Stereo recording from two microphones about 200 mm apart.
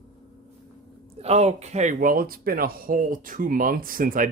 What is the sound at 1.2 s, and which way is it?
Speech, 30° right (ahead or behind).